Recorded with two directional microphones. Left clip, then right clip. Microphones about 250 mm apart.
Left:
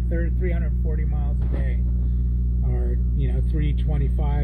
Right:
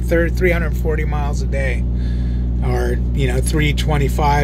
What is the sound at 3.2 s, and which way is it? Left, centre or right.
Speech, centre.